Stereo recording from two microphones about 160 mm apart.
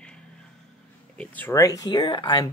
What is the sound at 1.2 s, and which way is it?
Speech, 10° left (ahead or behind).